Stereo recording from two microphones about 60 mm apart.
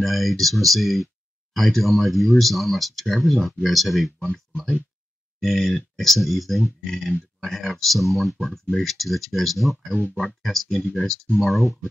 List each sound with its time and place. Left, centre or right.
0.0 s speech: centre
5.4 s speech: centre